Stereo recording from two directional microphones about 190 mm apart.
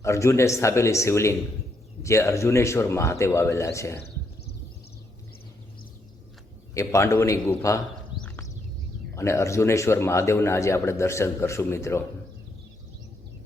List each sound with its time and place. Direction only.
0.0 s a man's voice: 15° left (ahead or behind)
6.7 s a man's voice: 15° left (ahead or behind)
9.1 s a man's voice: 15° left (ahead or behind)